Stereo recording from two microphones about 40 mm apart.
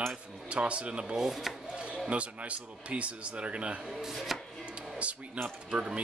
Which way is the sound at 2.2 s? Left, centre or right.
Right.